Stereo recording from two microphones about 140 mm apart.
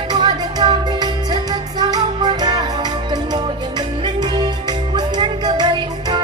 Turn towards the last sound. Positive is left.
turn(degrees=-30)  # may be behind; listen again after turning